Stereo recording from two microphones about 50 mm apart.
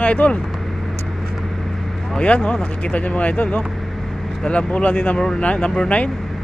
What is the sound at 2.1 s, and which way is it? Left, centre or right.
Speech, left.